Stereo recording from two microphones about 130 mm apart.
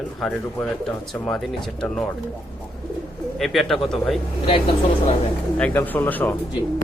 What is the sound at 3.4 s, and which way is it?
Speech, centre (ahead or behind).